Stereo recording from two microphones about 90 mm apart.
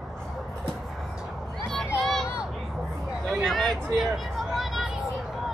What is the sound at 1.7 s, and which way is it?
Child singing, 5° left (ahead or behind).